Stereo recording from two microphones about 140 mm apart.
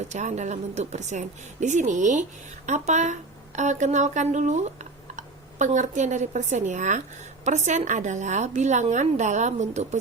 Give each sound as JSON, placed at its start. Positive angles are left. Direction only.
{"t": 0.1, "sound": "a woman's voice", "side_deg": -60}